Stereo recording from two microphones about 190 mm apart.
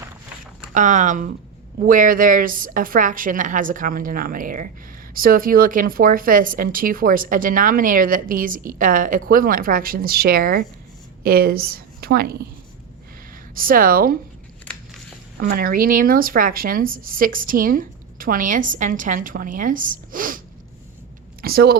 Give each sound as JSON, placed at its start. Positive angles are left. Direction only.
{"t": 0.7, "sound": "a woman's voice", "side_deg": -40}
{"t": 13.6, "sound": "speech", "side_deg": -50}
{"t": 15.4, "sound": "speech", "side_deg": -50}
{"t": 21.4, "sound": "speech", "side_deg": -55}